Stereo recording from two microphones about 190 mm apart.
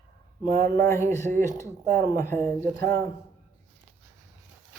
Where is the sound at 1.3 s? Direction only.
45° right (ahead or behind).